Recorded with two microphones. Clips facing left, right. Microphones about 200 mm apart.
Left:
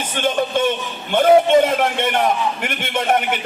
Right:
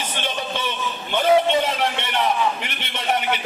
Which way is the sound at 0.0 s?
50° left (ahead or behind).